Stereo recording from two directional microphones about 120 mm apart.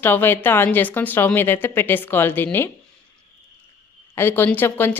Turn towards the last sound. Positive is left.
turn(degrees=20)  # may be behind; listen again after turning